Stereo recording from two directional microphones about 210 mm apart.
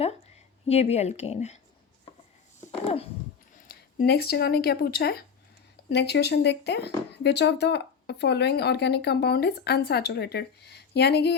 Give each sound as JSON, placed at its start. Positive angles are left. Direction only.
{"t": 0.7, "sound": "speech", "side_deg": 30}
{"t": 2.8, "sound": "speech", "side_deg": 25}
{"t": 3.7, "sound": "speech", "side_deg": 50}